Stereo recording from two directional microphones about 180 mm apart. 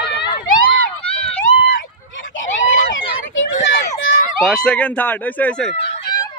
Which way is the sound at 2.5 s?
45° left (ahead or behind).